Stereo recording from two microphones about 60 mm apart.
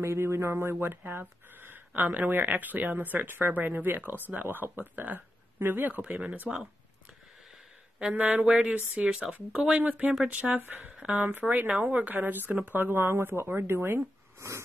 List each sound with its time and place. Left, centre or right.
0.0 s speech: right; by 6.6 s centre
8.1 s speech: right
11.2 s speech: right